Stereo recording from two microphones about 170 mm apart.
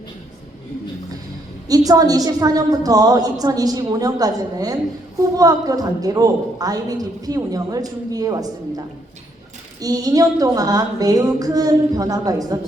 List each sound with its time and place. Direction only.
1.6 s a woman's voice: 20° right (ahead or behind)
9.8 s a woman's voice: 20° right (ahead or behind)